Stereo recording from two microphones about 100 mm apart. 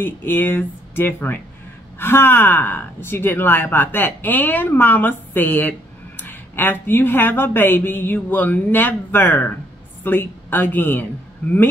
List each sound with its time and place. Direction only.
0.0 s speech: 20° left (ahead or behind)